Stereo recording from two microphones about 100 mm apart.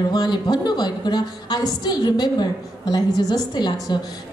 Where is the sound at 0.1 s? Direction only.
45° left (ahead or behind).